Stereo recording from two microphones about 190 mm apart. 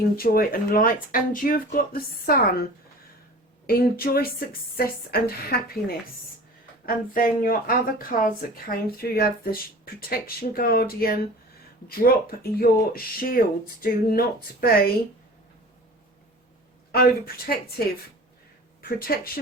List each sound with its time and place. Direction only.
0.2 s speech: 50° left (ahead or behind)
3.7 s speech: 50° left (ahead or behind)
6.8 s speech: 45° left (ahead or behind)
16.9 s speech: 55° left (ahead or behind)